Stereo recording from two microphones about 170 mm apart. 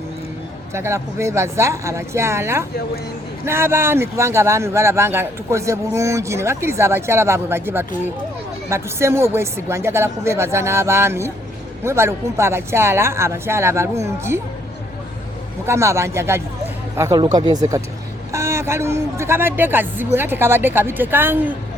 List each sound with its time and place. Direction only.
0.7 s a man's voice: 15° right (ahead or behind)
15.6 s a man's voice: 15° right (ahead or behind)